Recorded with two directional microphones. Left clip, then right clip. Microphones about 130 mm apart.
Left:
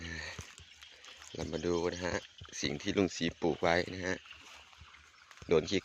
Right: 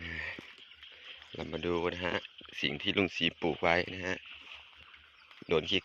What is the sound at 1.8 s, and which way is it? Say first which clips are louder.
Speech: right 2 dB; 5° left (ahead or behind).